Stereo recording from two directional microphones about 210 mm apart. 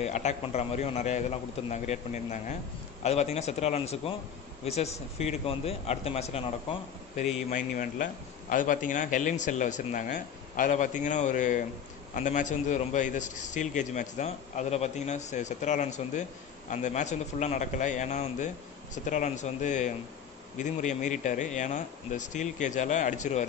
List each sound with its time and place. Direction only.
0.0 s a man's voice: 35° left (ahead or behind)